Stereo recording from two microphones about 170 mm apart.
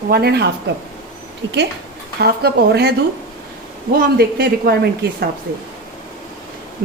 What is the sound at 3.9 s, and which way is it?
Speech, 60° right (ahead or behind).